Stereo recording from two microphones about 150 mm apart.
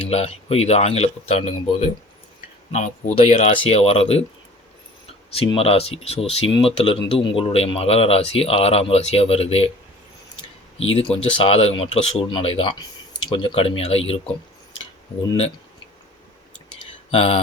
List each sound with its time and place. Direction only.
0.0 s speech: 45° left (ahead or behind)
5.3 s speech: 40° left (ahead or behind)
10.9 s speech: 40° left (ahead or behind)
17.1 s speech: 40° left (ahead or behind)